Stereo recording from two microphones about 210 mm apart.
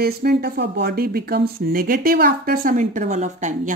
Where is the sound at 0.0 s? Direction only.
50° right (ahead or behind).